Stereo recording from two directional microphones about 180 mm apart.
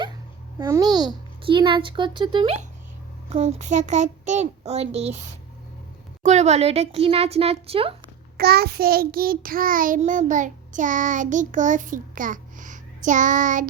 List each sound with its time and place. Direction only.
0.6 s a child's voice: 20° right (ahead or behind)
6.2 s a child's voice: 40° right (ahead or behind)
8.4 s child singing: 60° right (ahead or behind); by 13.7 s 45° right (ahead or behind)